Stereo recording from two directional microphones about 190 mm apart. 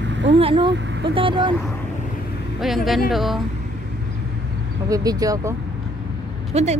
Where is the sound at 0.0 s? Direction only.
70° right (ahead or behind).